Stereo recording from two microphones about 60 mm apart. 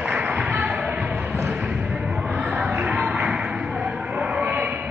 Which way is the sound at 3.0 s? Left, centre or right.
Centre.